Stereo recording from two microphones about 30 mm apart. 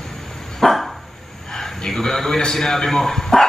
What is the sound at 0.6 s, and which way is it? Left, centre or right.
Dog, centre.